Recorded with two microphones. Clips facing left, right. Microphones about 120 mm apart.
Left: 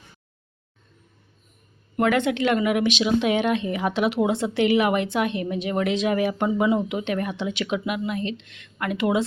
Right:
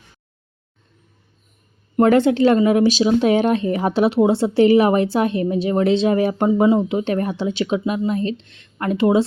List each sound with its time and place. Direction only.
2.0 s speech: 35° right (ahead or behind)